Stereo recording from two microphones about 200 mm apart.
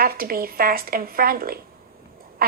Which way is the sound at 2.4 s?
45° right (ahead or behind).